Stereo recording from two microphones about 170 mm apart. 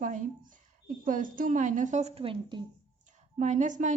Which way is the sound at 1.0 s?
50° right (ahead or behind).